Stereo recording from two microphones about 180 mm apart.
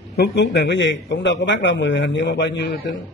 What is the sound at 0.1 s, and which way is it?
A man's voice, 65° left (ahead or behind).